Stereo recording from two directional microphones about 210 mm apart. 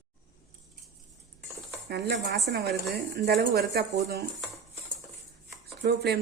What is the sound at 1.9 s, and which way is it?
Speech, 50° right (ahead or behind).